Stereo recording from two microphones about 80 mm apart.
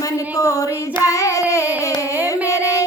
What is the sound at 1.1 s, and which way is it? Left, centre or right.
Singing, left.